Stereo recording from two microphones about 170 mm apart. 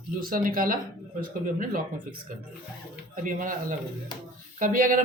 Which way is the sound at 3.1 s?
50° right (ahead or behind).